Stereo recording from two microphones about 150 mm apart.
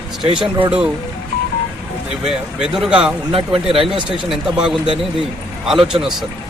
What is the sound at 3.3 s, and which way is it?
Speech, 40° right (ahead or behind).